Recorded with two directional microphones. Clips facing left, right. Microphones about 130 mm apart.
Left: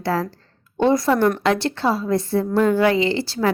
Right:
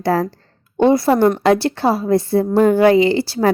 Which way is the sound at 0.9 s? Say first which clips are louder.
Right 4 dB; 30° right (ahead or behind).